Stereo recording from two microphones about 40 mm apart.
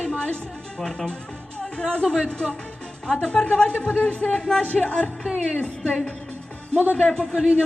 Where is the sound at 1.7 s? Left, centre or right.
Left.